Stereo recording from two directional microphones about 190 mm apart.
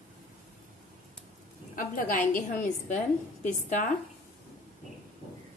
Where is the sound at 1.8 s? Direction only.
45° left (ahead or behind).